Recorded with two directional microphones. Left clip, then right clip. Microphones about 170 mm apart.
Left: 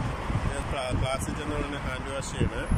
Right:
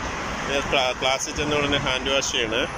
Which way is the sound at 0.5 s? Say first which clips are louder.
Right 13 dB; 10° right (ahead or behind).